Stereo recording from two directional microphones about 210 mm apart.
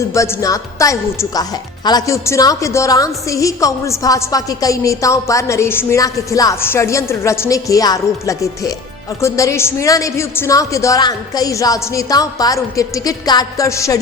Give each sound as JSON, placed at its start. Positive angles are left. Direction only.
{"t": 0.1, "sound": "a woman's voice", "side_deg": 15}